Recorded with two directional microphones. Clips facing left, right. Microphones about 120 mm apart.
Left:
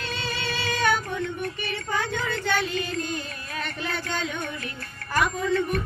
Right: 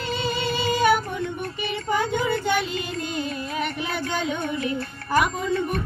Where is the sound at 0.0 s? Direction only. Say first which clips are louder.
Right 5 dB; 15° right (ahead or behind).